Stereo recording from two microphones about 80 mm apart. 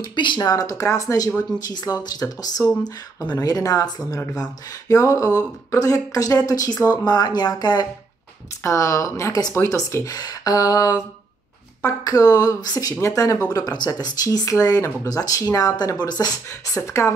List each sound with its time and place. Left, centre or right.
0.0 s speech: left
0.4 s speech: left
8.6 s a woman's voice: left
10.1 s speech: left
13.5 s speech: left
16.8 s a woman's voice: left